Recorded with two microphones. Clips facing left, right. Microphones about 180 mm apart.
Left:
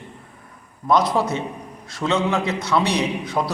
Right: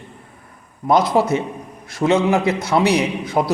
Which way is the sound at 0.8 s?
30° right (ahead or behind).